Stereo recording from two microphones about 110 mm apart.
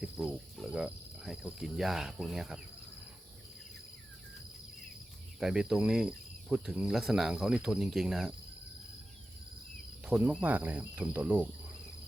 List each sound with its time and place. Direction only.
0.0 s speech: 5° right (ahead or behind)
5.4 s speech: 5° right (ahead or behind)
10.1 s speech: 15° right (ahead or behind)